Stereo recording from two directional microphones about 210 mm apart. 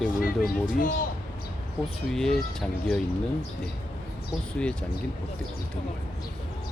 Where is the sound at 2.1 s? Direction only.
Centre (ahead or behind).